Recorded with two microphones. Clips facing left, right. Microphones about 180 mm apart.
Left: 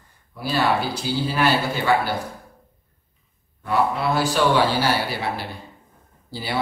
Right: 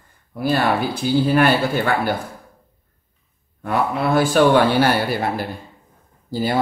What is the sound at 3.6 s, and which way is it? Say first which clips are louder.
A man's voice: right 1 dB; 55° right (ahead or behind).